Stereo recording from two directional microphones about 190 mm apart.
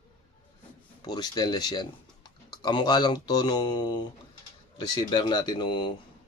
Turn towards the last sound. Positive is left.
turn(degrees=25)  # may be behind; listen again after turning